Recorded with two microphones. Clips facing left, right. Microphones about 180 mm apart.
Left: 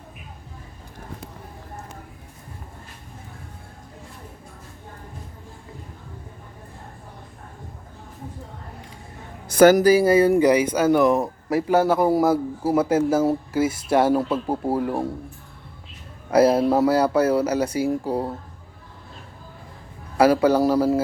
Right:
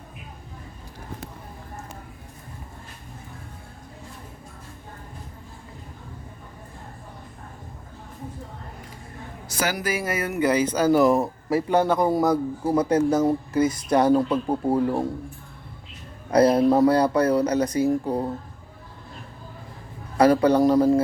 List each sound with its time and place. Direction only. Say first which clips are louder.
9.5 s a man's voice: left 14 dB; 50° left (ahead or behind)
9.8 s speech: left 11 dB; 30° left (ahead or behind)
10.5 s speech: left 2 dB; 10° left (ahead or behind)
10.9 s a man's voice: even; centre (ahead or behind)
16.3 s speech: even; 5° left (ahead or behind)
20.1 s speech: even; 5° left (ahead or behind)